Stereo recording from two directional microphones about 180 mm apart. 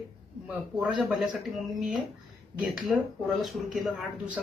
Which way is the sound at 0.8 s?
5° right (ahead or behind).